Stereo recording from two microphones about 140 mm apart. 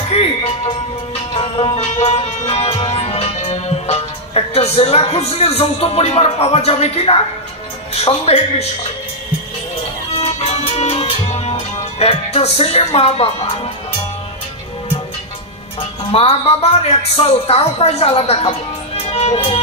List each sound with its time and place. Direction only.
0.1 s music: 45° left (ahead or behind)
2.9 s a woman's voice: 45° left (ahead or behind)
10.5 s music: 45° left (ahead or behind)
12.0 s a woman's voice: 45° left (ahead or behind)
16.1 s a woman's voice: 45° left (ahead or behind)
19.0 s music: 50° left (ahead or behind)